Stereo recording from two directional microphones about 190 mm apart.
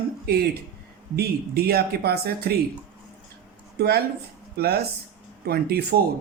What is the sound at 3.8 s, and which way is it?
Speech, 55° right (ahead or behind).